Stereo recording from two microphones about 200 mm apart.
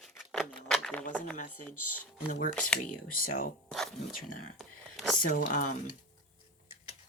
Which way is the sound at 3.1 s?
45° left (ahead or behind).